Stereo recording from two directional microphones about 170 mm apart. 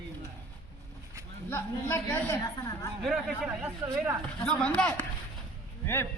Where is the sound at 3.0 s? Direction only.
Centre (ahead or behind).